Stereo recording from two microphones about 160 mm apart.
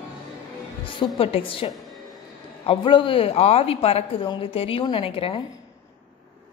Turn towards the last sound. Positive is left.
turn(degrees=35)  # may be behind; listen again after turning